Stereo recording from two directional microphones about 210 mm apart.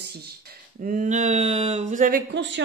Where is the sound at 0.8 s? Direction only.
40° right (ahead or behind).